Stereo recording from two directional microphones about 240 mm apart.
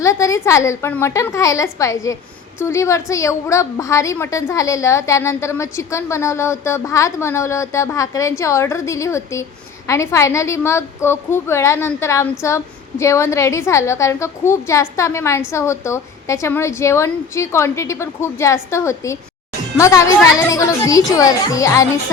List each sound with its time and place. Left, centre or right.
0.0 s a woman's voice: centre